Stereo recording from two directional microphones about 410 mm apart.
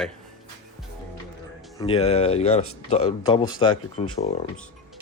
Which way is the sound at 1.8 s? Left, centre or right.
Centre.